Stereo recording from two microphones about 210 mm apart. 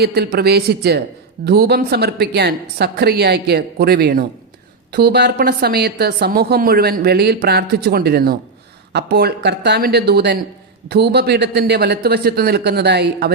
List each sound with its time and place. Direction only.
0.0 s a woman's voice: 50° right (ahead or behind)